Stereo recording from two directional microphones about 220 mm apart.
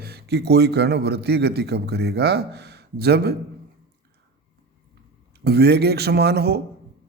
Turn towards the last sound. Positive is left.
turn(degrees=-45)  # may be behind; listen again after turning